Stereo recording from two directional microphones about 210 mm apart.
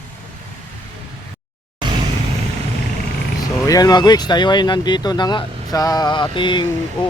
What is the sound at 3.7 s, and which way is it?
Speech, 20° left (ahead or behind).